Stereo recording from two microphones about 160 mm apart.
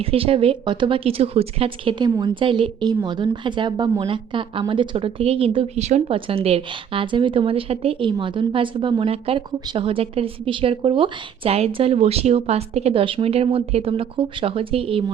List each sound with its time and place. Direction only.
0.0 s speech: 35° right (ahead or behind)